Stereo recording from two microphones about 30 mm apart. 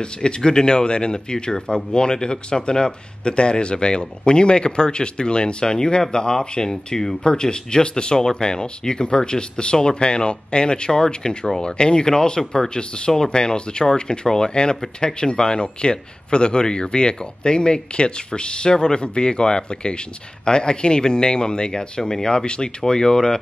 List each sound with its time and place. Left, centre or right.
0.0 s speech: left